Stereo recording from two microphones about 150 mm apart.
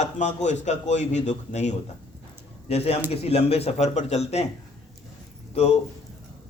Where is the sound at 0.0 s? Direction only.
50° left (ahead or behind).